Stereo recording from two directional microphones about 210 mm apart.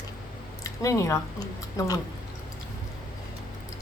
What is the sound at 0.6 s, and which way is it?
Speech, 15° left (ahead or behind).